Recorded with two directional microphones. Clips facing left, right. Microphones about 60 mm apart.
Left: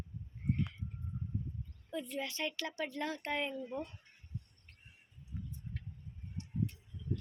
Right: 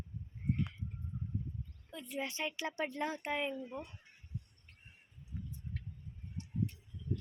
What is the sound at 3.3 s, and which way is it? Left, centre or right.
Speech, centre.